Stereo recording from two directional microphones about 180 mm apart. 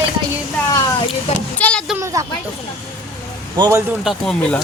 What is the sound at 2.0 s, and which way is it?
Speech, 15° right (ahead or behind).